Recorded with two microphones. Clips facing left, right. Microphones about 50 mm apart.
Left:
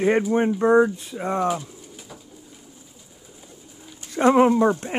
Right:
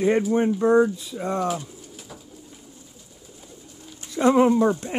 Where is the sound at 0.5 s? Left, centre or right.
Left.